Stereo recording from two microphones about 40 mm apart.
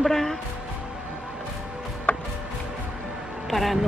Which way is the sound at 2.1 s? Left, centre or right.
Left.